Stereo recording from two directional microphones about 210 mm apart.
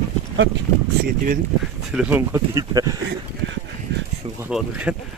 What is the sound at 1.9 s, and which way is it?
Speech, 5° right (ahead or behind).